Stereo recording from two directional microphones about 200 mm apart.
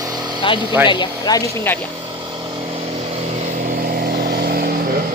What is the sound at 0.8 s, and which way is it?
Speech, 25° left (ahead or behind).